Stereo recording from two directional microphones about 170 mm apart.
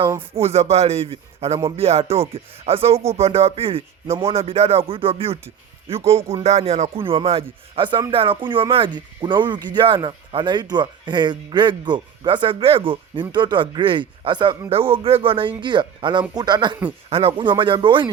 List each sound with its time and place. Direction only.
0.3 s speech: 35° right (ahead or behind)